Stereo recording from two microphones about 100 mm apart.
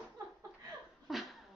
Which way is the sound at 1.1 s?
Centre (ahead or behind).